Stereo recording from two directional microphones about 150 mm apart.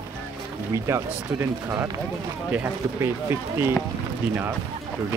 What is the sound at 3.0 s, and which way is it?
Speech, 15° right (ahead or behind).